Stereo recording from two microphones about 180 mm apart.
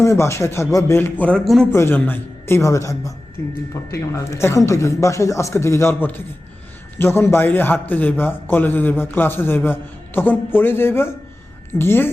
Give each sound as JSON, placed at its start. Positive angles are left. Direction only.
{"t": 0.0, "sound": "a man's voice", "side_deg": 15}
{"t": 1.2, "sound": "a man's voice", "side_deg": 5}